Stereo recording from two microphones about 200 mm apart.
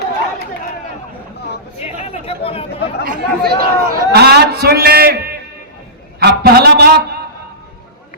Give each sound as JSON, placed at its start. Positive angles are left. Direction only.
{"t": 1.8, "sound": "chatter", "side_deg": 30}
{"t": 3.0, "sound": "a man's voice", "side_deg": -45}
{"t": 6.1, "sound": "a sound", "side_deg": -50}